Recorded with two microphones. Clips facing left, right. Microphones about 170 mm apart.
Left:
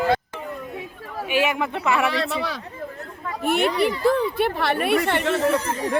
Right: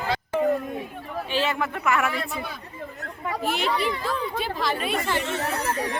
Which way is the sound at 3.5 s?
60° left (ahead or behind).